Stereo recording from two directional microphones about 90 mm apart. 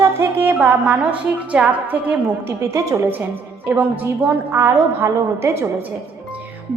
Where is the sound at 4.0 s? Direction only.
20° right (ahead or behind).